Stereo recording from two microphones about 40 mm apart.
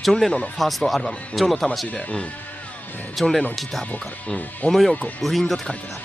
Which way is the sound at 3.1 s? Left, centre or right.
Centre.